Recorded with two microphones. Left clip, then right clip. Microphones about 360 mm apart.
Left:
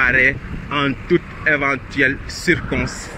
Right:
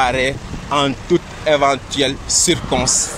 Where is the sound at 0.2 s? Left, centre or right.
Centre.